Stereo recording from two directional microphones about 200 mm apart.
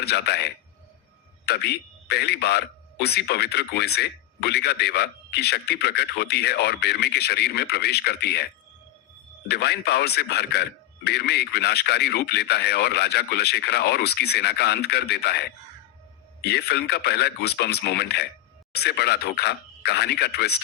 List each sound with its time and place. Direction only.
0.0 s speech: 55° left (ahead or behind)
9.5 s speech: 55° left (ahead or behind)